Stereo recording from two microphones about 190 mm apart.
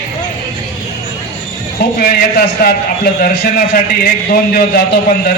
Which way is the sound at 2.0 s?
50° left (ahead or behind).